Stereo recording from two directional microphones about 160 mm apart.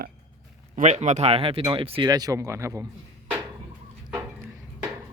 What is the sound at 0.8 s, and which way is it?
Speech, 45° right (ahead or behind).